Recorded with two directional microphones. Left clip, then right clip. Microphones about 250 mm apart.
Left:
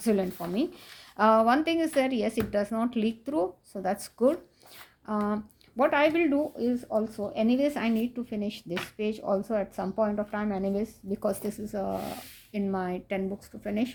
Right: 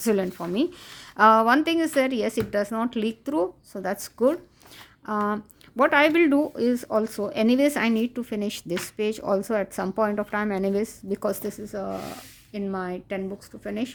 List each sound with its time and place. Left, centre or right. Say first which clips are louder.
0.0 s speech: right 3 dB; right